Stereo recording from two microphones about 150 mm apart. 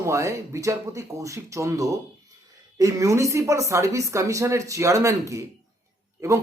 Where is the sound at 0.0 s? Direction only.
20° right (ahead or behind).